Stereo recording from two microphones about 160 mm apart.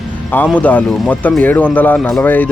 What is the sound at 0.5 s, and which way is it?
Speech, 10° left (ahead or behind).